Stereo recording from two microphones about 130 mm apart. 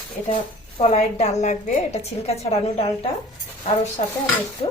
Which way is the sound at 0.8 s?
60° left (ahead or behind).